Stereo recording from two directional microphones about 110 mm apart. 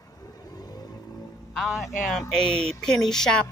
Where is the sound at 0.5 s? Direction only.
35° left (ahead or behind).